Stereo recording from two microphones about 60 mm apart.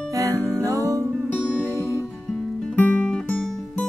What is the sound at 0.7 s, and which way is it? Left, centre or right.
Music, right.